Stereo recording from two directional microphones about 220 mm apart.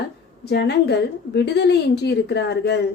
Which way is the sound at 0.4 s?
50° left (ahead or behind).